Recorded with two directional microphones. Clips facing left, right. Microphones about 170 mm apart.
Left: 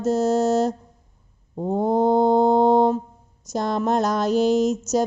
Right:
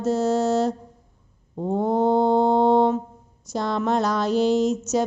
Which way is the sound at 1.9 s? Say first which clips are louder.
Left 2 dB; 45° left (ahead or behind).